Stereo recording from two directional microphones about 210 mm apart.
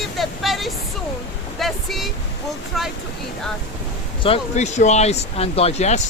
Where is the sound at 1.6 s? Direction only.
Centre (ahead or behind).